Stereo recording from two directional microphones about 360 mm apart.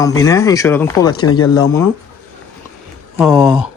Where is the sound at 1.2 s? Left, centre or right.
Left.